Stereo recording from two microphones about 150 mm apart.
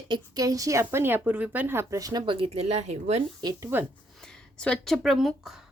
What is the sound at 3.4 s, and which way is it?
Speech, 25° right (ahead or behind).